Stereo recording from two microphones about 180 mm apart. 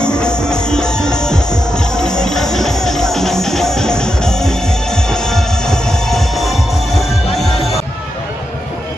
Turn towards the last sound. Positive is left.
turn(degrees=0)  # may be behind; listen again after turning